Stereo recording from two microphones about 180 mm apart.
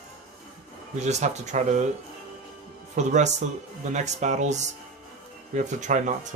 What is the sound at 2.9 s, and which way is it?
Speech, 40° right (ahead or behind).